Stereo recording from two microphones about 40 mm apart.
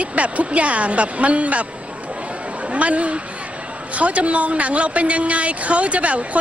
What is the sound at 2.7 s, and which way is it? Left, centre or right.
A woman's voice, right.